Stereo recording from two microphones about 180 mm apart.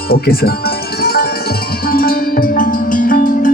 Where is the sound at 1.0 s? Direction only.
60° left (ahead or behind).